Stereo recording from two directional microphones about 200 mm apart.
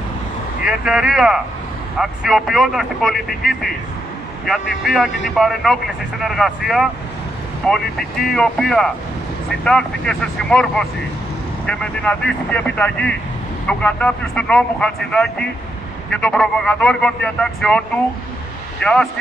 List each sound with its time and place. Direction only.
0.6 s speech: 5° right (ahead or behind)